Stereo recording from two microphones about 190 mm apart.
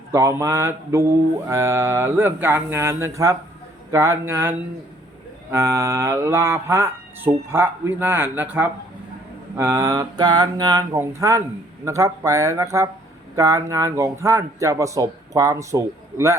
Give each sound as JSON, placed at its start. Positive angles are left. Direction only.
{"t": 0.1, "sound": "mantra", "side_deg": -15}